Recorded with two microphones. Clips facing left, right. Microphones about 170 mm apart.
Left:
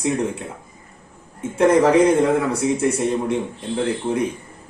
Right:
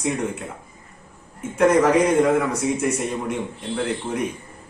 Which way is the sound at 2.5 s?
30° left (ahead or behind).